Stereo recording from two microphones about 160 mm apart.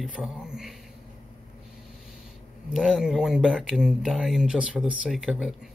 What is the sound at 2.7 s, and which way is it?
Speech, centre (ahead or behind).